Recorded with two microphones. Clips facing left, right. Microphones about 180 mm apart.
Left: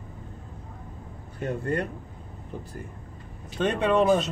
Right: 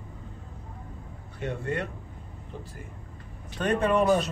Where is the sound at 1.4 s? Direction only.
35° left (ahead or behind).